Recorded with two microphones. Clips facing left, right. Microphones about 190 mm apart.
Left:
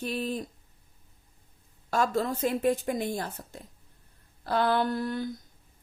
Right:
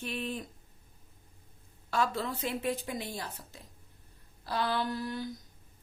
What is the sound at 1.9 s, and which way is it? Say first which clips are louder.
Speech: left 5 dB; 45° left (ahead or behind).